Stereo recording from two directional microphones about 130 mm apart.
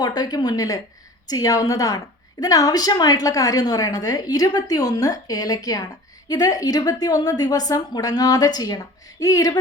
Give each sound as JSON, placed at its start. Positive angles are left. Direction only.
{"t": 0.0, "sound": "a woman's voice", "side_deg": 30}